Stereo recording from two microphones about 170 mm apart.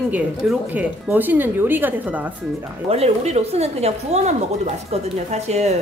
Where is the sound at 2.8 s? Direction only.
35° right (ahead or behind).